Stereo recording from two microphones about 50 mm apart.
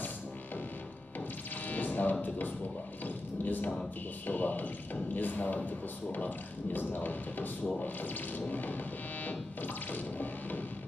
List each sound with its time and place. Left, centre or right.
1.7 s music: left
2.2 s speech: left
9.2 s music: left
10.1 s speech: left